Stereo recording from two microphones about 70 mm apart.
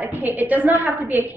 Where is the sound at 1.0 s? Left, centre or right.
Right.